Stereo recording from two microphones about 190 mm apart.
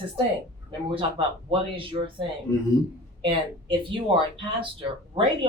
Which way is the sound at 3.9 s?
25° right (ahead or behind).